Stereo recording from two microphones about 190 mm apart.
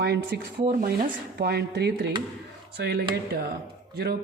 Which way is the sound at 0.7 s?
45° right (ahead or behind).